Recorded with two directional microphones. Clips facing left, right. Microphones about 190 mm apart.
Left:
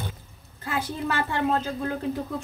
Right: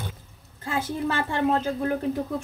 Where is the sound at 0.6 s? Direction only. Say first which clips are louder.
Right 2 dB; 25° right (ahead or behind).